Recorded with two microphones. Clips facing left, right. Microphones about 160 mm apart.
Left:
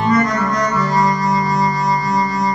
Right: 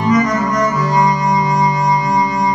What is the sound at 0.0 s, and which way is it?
Music, 20° right (ahead or behind).